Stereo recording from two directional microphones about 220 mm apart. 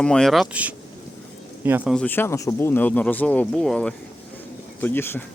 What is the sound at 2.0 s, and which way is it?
Speech, 10° left (ahead or behind).